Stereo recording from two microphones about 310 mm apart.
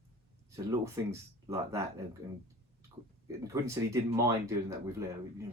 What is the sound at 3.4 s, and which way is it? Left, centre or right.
Speech, centre.